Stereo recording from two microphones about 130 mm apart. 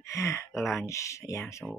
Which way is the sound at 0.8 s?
25° left (ahead or behind).